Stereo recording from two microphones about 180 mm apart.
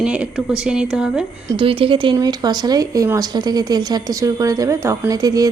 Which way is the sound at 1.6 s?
30° right (ahead or behind).